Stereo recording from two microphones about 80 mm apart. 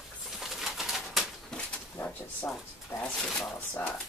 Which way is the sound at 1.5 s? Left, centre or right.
Centre.